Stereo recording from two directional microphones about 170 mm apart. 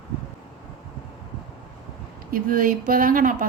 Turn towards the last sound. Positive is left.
turn(degrees=-55)  # may be behind; listen again after turning